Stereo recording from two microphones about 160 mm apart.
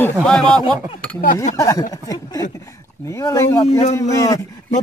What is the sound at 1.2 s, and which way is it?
Speech, 60° left (ahead or behind).